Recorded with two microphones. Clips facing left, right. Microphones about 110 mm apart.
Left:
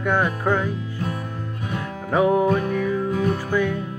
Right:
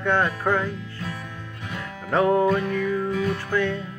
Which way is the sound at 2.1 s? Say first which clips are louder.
Left 1 dB; 10° left (ahead or behind).